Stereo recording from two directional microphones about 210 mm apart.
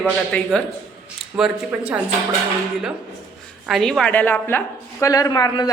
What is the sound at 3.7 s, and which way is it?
A woman's voice, centre (ahead or behind).